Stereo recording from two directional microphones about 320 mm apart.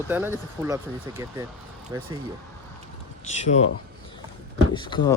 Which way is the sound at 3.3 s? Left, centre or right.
Left.